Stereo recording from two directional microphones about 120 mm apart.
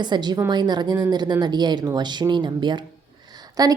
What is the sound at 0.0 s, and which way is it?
Speech, 35° right (ahead or behind).